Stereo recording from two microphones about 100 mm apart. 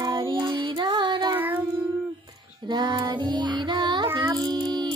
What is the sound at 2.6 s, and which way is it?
Child singing, 50° right (ahead or behind).